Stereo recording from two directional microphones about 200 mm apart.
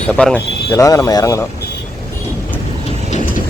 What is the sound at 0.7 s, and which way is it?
Speech, 15° left (ahead or behind).